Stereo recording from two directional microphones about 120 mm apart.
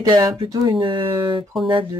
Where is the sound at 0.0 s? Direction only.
35° right (ahead or behind).